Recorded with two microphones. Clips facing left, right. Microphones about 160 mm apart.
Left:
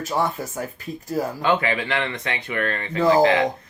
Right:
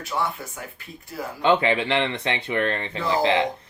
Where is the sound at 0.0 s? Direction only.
40° left (ahead or behind).